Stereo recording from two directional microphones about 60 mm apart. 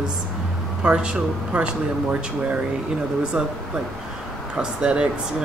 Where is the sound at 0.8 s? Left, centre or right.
Centre.